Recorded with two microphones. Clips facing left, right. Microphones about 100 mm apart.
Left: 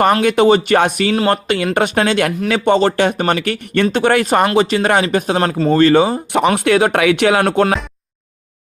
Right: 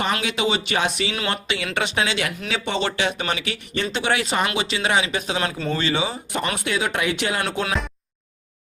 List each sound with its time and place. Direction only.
0.0 s speech: 50° left (ahead or behind)
1.1 s speech: 40° left (ahead or behind)
6.3 s speech: 65° left (ahead or behind)